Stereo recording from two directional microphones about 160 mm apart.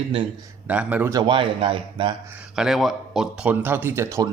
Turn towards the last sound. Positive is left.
turn(degrees=-15)  # may be behind; listen again after turning